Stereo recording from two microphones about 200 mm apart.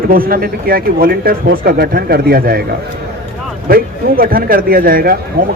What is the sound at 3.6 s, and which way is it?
Speech, 45° right (ahead or behind).